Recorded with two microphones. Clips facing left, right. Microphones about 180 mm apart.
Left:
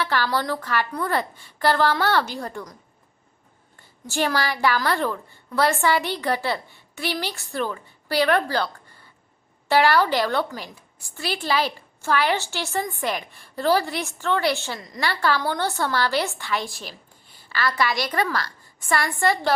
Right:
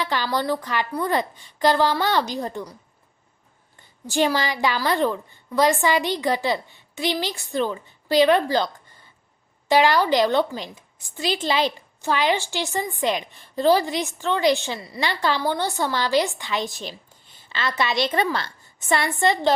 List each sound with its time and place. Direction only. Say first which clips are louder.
0.0 s a woman's voice: even; 15° right (ahead or behind)
4.0 s a woman's voice: right 2 dB; 15° right (ahead or behind)